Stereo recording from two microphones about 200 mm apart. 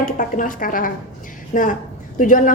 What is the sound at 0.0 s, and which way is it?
A woman's voice, 40° left (ahead or behind).